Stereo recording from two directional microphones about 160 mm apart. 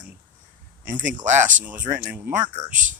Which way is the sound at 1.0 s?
50° right (ahead or behind).